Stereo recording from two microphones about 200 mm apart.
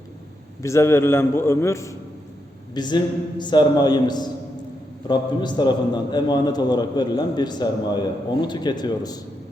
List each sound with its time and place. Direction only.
0.6 s a man's voice: 15° left (ahead or behind)